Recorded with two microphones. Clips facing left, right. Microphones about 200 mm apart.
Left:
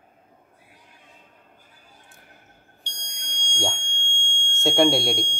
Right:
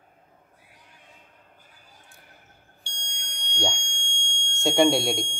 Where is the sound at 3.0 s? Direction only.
35° left (ahead or behind).